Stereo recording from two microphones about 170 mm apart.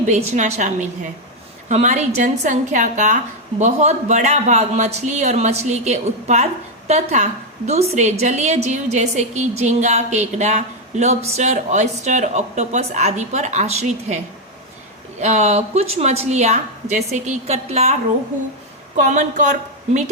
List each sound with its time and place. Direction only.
0.1 s a man's voice: 40° right (ahead or behind)
15.2 s a man's voice: 40° right (ahead or behind)
18.9 s a woman's voice: 45° right (ahead or behind)